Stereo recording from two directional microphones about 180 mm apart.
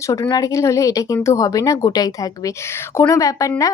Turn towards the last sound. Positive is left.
turn(degrees=20)  # may be behind; listen again after turning